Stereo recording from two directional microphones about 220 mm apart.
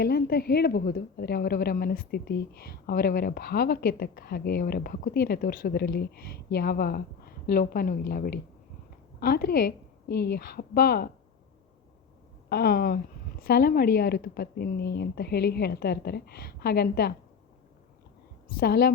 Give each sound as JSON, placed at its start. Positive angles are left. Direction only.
{"t": 0.0, "sound": "a woman's voice", "side_deg": 45}
{"t": 12.5, "sound": "a woman's voice", "side_deg": 45}
{"t": 18.5, "sound": "a woman's voice", "side_deg": 45}